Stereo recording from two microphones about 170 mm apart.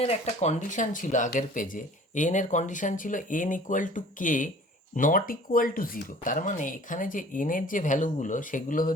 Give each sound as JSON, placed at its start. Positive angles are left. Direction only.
{"t": 0.0, "sound": "speech", "side_deg": 40}